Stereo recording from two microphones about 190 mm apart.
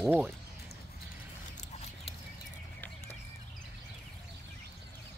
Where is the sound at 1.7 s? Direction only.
35° left (ahead or behind).